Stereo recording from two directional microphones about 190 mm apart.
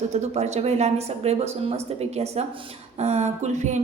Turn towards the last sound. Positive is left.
turn(degrees=-40)  # may be behind; listen again after turning